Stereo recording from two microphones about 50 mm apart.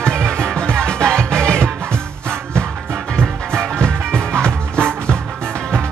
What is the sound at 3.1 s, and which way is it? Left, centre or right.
Music, centre.